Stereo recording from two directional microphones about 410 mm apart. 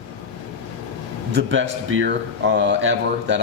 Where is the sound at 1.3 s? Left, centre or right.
Right.